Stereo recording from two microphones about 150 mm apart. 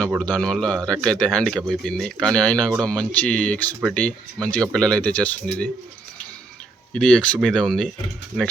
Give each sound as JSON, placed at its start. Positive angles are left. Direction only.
{"t": 0.2, "sound": "speech", "side_deg": 5}
{"t": 6.9, "sound": "speech", "side_deg": 5}